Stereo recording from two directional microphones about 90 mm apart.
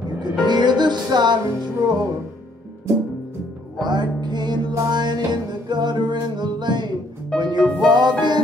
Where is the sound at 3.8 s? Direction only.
55° right (ahead or behind).